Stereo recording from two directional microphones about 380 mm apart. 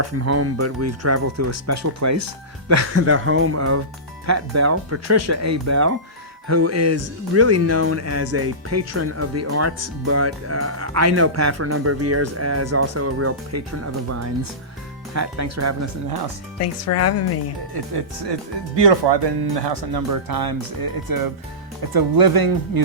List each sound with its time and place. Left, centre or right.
0.0 s speech: right
16.6 s speech: left
17.7 s speech: right
20.1 s speech: right